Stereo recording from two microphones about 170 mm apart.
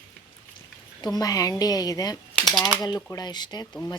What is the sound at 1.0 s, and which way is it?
Speech, 20° left (ahead or behind).